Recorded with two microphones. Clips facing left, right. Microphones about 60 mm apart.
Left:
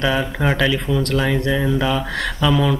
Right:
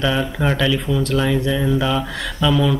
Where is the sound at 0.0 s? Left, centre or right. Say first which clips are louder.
Even; centre.